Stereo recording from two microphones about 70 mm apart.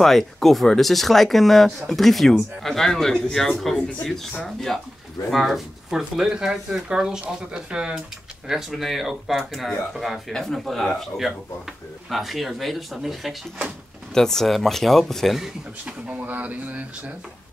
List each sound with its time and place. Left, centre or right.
0.0 s speech: centre
12.1 s speech: centre
15.8 s speech: centre